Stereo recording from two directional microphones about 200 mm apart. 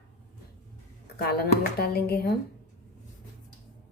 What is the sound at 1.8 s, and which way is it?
Speech, 50° left (ahead or behind).